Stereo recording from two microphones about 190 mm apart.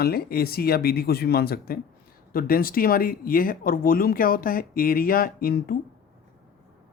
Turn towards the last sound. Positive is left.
turn(degrees=50)  # may be behind; listen again after turning